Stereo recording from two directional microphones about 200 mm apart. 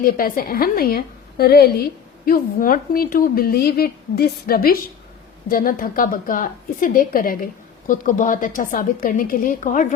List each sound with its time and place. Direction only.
0.0 s speech: 45° left (ahead or behind)